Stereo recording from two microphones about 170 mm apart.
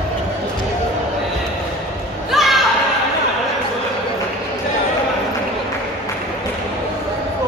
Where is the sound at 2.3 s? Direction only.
Centre (ahead or behind).